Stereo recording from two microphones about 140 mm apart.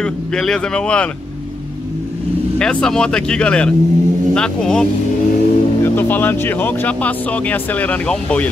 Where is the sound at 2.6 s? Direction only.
5° left (ahead or behind).